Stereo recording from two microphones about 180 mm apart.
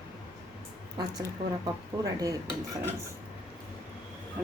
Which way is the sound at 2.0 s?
20° right (ahead or behind).